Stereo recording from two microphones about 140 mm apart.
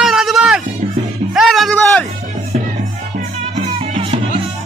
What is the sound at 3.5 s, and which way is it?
Music, 60° right (ahead or behind).